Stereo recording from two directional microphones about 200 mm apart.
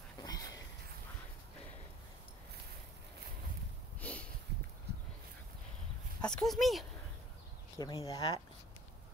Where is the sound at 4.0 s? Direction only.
5° left (ahead or behind).